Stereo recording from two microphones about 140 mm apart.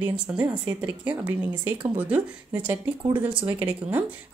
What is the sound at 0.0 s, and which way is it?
A woman's voice, 10° right (ahead or behind).